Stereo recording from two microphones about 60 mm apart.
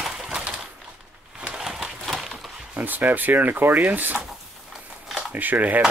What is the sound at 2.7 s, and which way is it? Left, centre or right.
Speech, right.